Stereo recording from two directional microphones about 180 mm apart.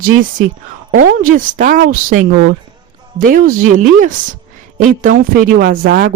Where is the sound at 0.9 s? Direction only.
45° right (ahead or behind).